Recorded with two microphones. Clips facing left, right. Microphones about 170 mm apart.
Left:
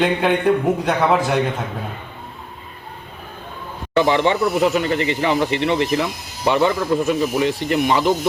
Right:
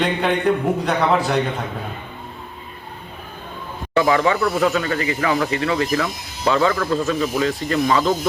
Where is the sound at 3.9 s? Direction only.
25° left (ahead or behind).